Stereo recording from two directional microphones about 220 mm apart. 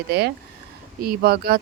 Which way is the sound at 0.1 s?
45° right (ahead or behind).